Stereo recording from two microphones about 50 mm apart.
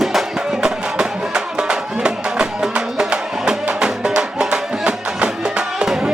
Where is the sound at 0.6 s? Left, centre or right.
Centre.